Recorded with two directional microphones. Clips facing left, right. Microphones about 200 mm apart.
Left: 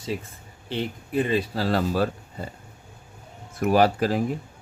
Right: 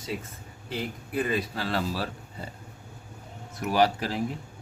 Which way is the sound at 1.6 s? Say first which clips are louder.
Left 8 dB; 45° left (ahead or behind).